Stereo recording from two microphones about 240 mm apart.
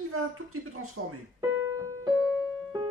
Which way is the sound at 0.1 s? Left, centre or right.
Right.